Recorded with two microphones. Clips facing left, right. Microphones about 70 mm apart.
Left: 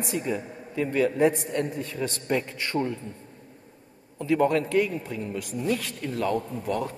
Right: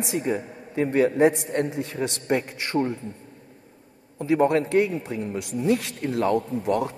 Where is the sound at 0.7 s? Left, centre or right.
Right.